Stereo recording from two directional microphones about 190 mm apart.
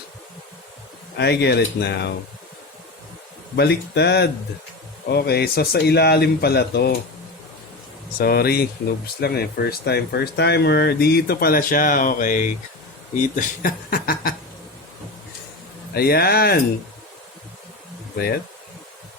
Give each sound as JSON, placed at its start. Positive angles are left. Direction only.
{"t": 1.1, "sound": "speech", "side_deg": 60}
{"t": 3.5, "sound": "speech", "side_deg": 60}
{"t": 8.2, "sound": "speech", "side_deg": 55}
{"t": 16.0, "sound": "speech", "side_deg": 55}